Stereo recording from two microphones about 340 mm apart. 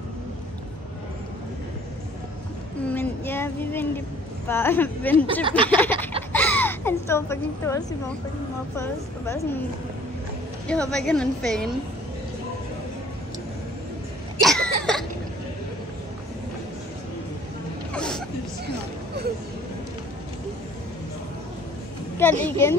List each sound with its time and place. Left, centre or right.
2.9 s a sound: centre
4.5 s a woman's voice: centre
5.1 s speech: centre
5.8 s a woman's voice: centre
6.3 s hiccup: centre
8.7 s a woman's voice: centre
10.7 s a woman's voice: centre
14.4 s cough: centre
17.9 s a sound: centre
22.1 s a woman's voice: centre